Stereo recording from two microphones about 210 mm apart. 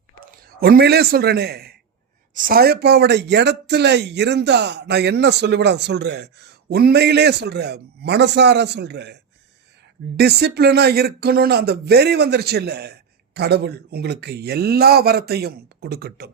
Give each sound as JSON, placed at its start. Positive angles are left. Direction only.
{"t": 0.6, "sound": "a man's voice", "side_deg": -50}
{"t": 10.2, "sound": "a man's voice", "side_deg": -50}